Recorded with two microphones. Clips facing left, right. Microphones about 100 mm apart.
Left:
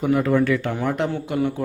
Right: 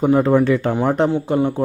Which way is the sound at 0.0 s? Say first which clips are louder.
Right 4 dB; 30° right (ahead or behind).